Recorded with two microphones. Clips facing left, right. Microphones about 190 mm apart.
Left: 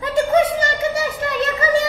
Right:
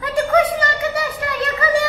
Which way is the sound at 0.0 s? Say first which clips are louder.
Left 1 dB; 25° left (ahead or behind).